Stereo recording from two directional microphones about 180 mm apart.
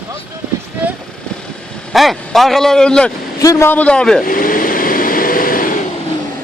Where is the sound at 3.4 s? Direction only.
15° left (ahead or behind).